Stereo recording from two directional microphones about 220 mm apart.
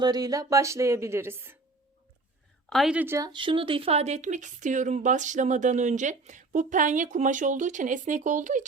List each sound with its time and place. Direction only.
0.0 s speech: 15° right (ahead or behind)
2.6 s speech: centre (ahead or behind); by 8.6 s 35° right (ahead or behind)